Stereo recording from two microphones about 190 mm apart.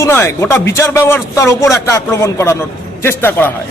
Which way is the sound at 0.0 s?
15° left (ahead or behind).